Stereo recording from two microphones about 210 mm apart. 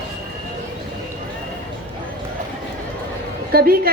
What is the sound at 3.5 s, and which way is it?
Speech, 45° right (ahead or behind).